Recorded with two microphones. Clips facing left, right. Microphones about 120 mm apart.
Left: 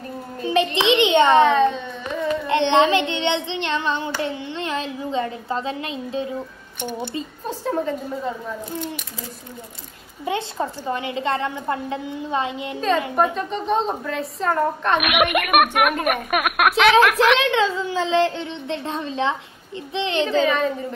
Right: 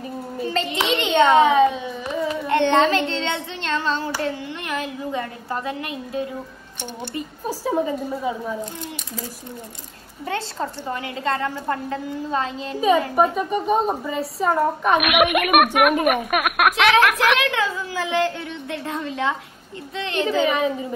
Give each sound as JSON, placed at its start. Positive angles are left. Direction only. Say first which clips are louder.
{"t": 0.9, "sound": "a child's voice", "louder": "even", "side_deg": 20}
{"t": 1.4, "sound": "a sound", "louder": "right 1 dB", "side_deg": -5}
{"t": 2.5, "sound": "a woman's voice", "louder": "even", "side_deg": 20}
{"t": 7.4, "sound": "a woman's voice", "louder": "right 2 dB", "side_deg": -10}
{"t": 10.2, "sound": "a woman's voice", "louder": "left 2 dB", "side_deg": 15}
{"t": 13.1, "sound": "a woman's voice", "louder": "right 2 dB", "side_deg": -10}
{"t": 17.4, "sound": "a woman's voice", "louder": "left 3 dB", "side_deg": 25}
{"t": 20.2, "sound": "a woman's voice", "louder": "right 2 dB", "side_deg": -5}